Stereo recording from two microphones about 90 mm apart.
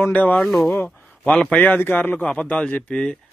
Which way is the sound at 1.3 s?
15° left (ahead or behind).